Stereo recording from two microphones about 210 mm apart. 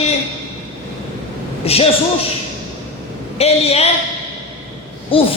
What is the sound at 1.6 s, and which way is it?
Speech, 30° left (ahead or behind).